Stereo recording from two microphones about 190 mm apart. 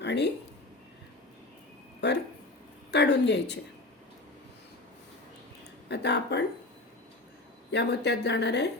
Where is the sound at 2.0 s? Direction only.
65° left (ahead or behind).